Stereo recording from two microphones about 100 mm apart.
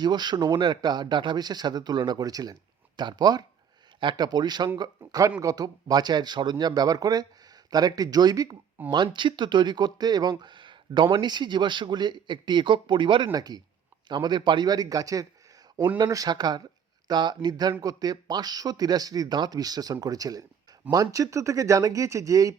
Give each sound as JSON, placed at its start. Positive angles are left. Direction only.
{"t": 0.0, "sound": "speech", "side_deg": -45}
{"t": 13.3, "sound": "speech", "side_deg": -40}